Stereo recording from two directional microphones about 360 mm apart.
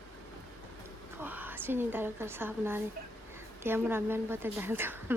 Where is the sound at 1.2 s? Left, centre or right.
Centre.